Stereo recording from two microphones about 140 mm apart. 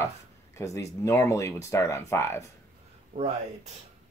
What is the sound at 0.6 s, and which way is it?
Speech, 20° left (ahead or behind).